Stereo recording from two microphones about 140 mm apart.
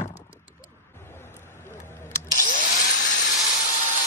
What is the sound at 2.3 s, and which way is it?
Tools, 70° left (ahead or behind).